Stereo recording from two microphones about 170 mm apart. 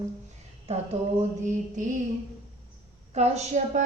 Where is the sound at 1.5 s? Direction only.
50° right (ahead or behind).